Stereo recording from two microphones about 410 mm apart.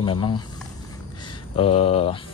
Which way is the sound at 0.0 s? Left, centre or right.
Centre.